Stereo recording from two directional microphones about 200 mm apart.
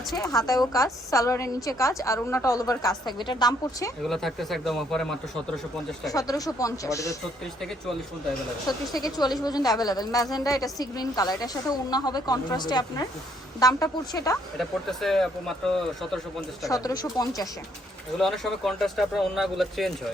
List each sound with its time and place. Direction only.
0.4 s a woman's voice: 15° left (ahead or behind)
4.0 s speech: centre (ahead or behind)
6.1 s a woman's voice: 15° left (ahead or behind)
9.0 s a woman's voice: 20° left (ahead or behind)
14.6 s speech: centre (ahead or behind)
16.6 s a woman's voice: 15° left (ahead or behind)
18.2 s speech: centre (ahead or behind)